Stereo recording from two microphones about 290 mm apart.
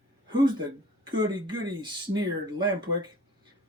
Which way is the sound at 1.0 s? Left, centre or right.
Centre.